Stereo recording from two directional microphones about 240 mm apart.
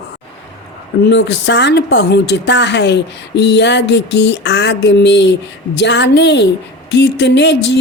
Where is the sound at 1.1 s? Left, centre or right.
Left.